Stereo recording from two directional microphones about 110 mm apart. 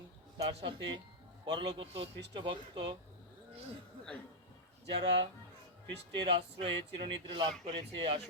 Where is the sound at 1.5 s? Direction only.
45° right (ahead or behind).